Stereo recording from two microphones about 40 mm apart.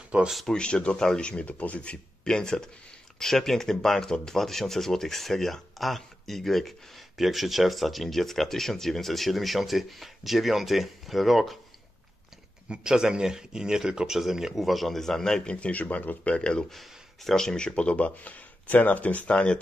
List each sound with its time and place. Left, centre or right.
0.1 s speech: right
0.5 s speech: left
1.6 s speech: left
2.2 s speech: centre
12.6 s speech: right
12.9 s speech: centre
15.4 s speech: left
15.7 s speech: left
16.3 s speech: left
16.7 s speech: centre
17.6 s speech: left